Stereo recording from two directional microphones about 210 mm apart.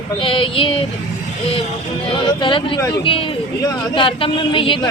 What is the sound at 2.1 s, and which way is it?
Speech, 25° left (ahead or behind).